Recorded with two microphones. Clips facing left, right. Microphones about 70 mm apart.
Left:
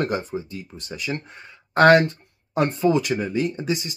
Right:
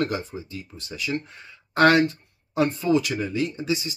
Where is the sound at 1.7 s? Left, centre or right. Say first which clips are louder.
Left 3 dB; left.